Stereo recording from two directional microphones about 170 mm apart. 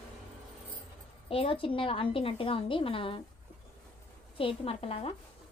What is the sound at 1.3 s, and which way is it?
A woman's voice, 35° left (ahead or behind).